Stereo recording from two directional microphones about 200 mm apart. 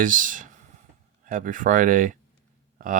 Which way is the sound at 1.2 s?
40° right (ahead or behind).